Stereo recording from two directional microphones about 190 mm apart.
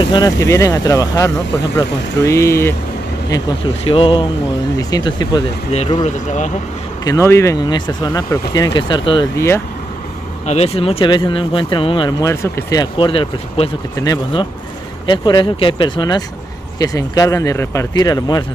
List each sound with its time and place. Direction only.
0.1 s speech: 20° left (ahead or behind)
5.7 s speech: 35° left (ahead or behind)
7.1 s speech: 15° left (ahead or behind)
10.4 s speech: 35° left (ahead or behind)